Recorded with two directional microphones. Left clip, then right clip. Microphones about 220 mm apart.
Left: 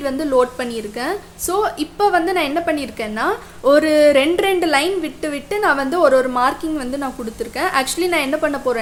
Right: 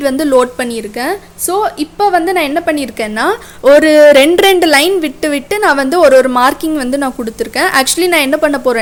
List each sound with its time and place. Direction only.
0.0 s a woman's voice: 35° right (ahead or behind)